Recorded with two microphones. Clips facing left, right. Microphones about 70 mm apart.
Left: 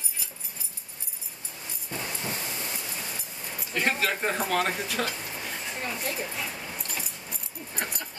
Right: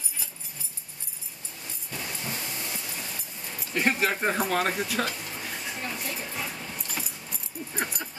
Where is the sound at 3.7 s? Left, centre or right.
Centre.